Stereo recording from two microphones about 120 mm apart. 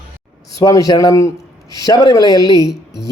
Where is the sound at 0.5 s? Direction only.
30° left (ahead or behind).